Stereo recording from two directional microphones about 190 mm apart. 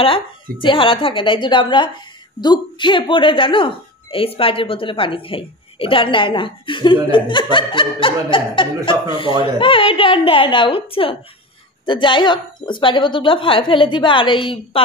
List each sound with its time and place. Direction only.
0.0 s speech: 25° left (ahead or behind)